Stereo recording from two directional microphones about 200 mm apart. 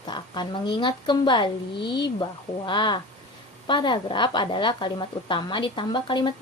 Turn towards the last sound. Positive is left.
turn(degrees=20)  # may be behind; listen again after turning